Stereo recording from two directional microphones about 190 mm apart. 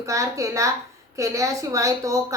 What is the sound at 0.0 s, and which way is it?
A woman's voice, 15° right (ahead or behind).